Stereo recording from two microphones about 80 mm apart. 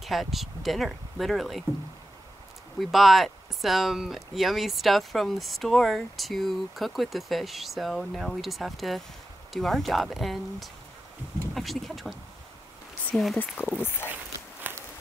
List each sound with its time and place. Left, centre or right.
0.0 s speech: centre
2.8 s speech: centre
13.6 s speech: left
14.6 s walk: right